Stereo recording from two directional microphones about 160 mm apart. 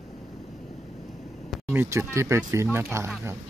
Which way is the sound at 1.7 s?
15° right (ahead or behind).